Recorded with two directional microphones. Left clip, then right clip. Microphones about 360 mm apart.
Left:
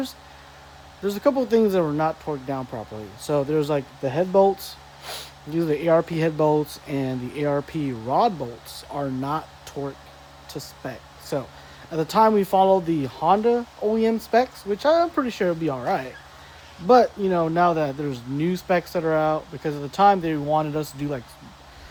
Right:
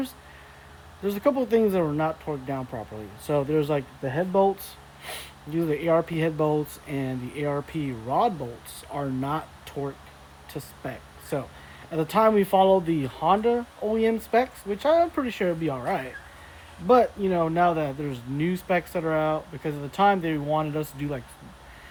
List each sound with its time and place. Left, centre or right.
1.0 s speech: centre